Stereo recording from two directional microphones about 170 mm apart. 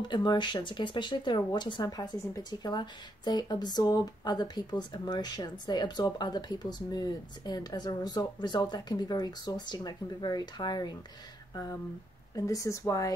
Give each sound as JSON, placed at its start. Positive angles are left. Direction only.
{"t": 0.0, "sound": "a woman's voice", "side_deg": 25}